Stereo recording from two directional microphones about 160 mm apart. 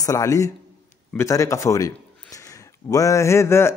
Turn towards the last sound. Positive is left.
turn(degrees=15)  # may be behind; listen again after turning